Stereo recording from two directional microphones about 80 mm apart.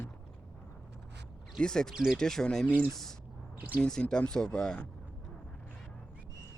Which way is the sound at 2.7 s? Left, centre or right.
Right.